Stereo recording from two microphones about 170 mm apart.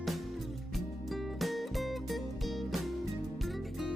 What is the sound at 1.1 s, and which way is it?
Music, centre (ahead or behind).